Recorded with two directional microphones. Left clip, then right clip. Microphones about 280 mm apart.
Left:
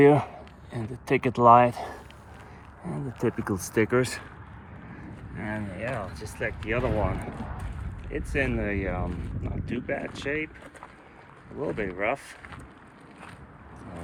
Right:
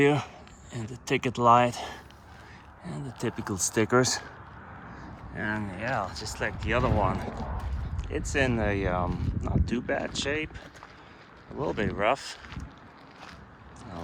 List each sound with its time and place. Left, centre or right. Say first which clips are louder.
0.0 s a sound: left 5 dB; centre
1.0 s speech: left 4 dB; centre
2.8 s speech: left 5 dB; centre
3.4 s speech: right 2 dB; centre
5.4 s speech: right 2 dB; centre
7.1 s speech: right 2 dB; right
8.1 s speech: right 1 dB; centre
11.6 s speech: right 1 dB; centre